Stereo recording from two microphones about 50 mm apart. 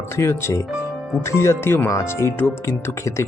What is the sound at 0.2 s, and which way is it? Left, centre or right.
Speech, left.